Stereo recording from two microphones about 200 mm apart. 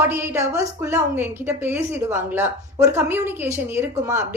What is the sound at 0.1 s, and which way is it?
A woman's voice, 15° right (ahead or behind).